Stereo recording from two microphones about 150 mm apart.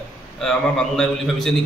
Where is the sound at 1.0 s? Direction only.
5° left (ahead or behind).